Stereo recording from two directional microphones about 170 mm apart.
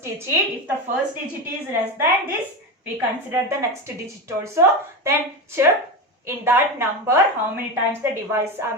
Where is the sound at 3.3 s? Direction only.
15° right (ahead or behind).